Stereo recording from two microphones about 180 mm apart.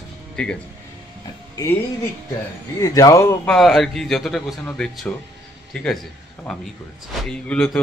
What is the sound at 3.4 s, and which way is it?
A man's voice, centre (ahead or behind).